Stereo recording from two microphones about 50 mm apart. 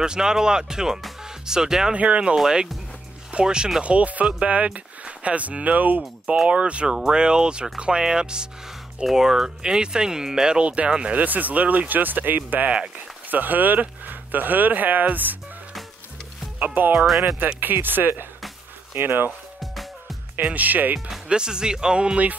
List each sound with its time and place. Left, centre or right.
0.0 s speech: centre
2.0 s speech: right
2.3 s speech: centre
10.6 s speech: right
16.5 s speech: right
16.9 s speech: centre
17.6 s speech: right
19.6 s music: centre
20.3 s speech: right
21.3 s speech: centre